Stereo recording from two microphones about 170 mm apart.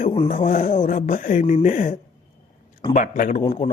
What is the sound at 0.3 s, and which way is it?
A man's voice, 50° left (ahead or behind).